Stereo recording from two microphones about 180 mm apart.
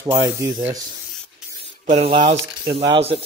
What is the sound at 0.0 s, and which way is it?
Speech, 15° right (ahead or behind).